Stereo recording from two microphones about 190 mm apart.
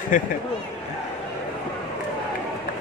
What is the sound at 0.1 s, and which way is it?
Speech, 45° left (ahead or behind).